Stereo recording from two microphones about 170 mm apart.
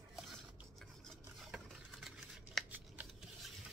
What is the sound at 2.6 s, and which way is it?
Shuffling cards, centre (ahead or behind).